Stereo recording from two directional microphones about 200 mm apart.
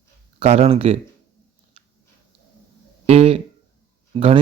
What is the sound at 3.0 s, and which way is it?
Speech, 30° right (ahead or behind).